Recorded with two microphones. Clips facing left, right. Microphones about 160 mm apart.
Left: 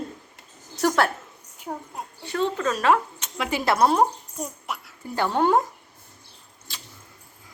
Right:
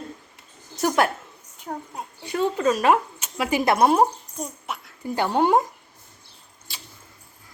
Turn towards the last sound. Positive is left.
turn(degrees=-10)  # may be behind; listen again after turning